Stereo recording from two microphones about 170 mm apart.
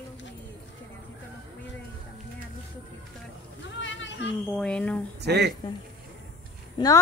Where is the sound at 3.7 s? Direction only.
90° left.